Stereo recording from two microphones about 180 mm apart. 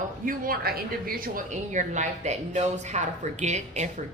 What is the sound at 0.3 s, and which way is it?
A woman's voice, 55° right (ahead or behind).